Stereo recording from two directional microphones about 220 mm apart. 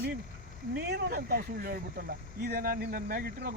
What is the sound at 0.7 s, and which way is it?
Speech, 50° right (ahead or behind).